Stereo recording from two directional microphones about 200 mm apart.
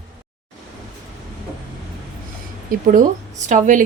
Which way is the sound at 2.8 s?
40° right (ahead or behind).